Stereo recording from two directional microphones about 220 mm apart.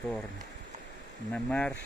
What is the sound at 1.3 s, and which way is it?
Speech, 5° left (ahead or behind).